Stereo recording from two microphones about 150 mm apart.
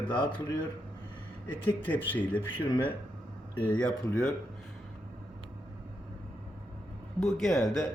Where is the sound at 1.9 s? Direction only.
10° left (ahead or behind).